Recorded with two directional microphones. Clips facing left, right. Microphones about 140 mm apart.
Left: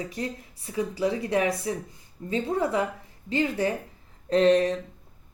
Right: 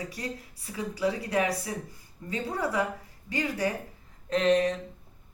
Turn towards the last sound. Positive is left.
turn(degrees=35)  # may be behind; listen again after turning